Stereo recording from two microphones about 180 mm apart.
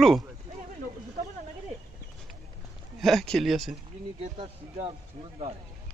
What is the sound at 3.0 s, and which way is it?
Speech, centre (ahead or behind).